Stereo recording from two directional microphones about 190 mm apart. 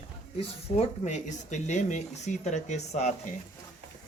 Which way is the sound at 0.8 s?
40° left (ahead or behind).